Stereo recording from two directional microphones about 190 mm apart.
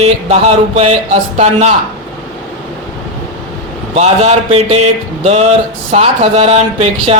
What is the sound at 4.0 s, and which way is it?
Speech, 35° right (ahead or behind).